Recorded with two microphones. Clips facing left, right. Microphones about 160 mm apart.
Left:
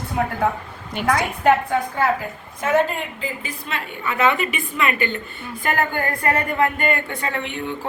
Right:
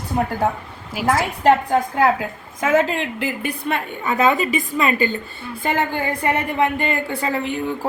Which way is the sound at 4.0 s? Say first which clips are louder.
Right 2 dB; 35° right (ahead or behind).